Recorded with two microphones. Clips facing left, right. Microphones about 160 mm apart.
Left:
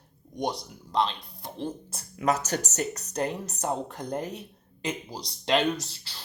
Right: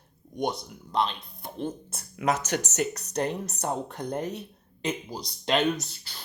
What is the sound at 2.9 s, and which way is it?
Speech, 35° right (ahead or behind).